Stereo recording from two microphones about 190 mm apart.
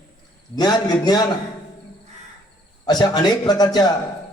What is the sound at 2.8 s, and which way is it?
A man's voice, 20° left (ahead or behind).